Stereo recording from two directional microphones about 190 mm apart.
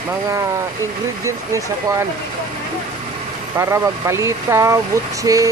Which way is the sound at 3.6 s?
15° right (ahead or behind).